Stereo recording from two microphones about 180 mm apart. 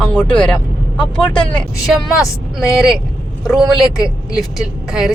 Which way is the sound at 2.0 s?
20° left (ahead or behind).